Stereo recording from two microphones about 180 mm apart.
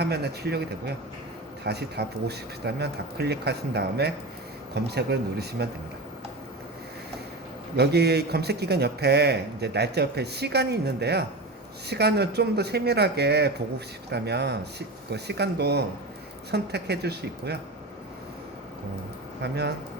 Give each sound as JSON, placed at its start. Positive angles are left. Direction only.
{"t": 0.0, "sound": "speech", "side_deg": -65}
{"t": 7.8, "sound": "speech", "side_deg": -65}
{"t": 19.4, "sound": "speech", "side_deg": -65}